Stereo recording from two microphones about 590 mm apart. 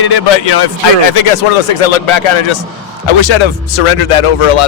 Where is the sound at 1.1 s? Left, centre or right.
Left.